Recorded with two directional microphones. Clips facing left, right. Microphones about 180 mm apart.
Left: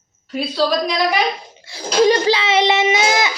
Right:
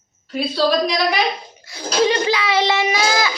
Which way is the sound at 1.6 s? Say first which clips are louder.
Left 3 dB; 30° left (ahead or behind).